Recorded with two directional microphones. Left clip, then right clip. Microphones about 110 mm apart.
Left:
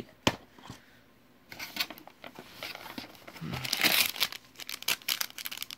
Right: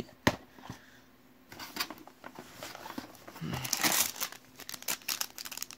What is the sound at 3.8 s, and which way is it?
Crumpling, 35° left (ahead or behind).